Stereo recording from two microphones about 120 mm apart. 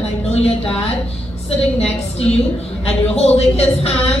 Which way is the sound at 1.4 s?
60° left (ahead or behind).